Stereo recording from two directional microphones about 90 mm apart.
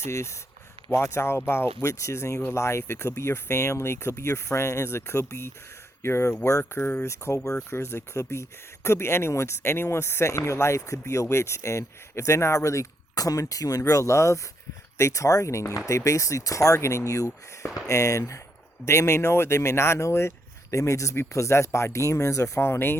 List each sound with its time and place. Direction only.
0.0 s speech: 30° left (ahead or behind)